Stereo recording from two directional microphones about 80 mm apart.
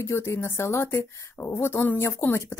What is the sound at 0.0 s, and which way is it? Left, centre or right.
Speech, left.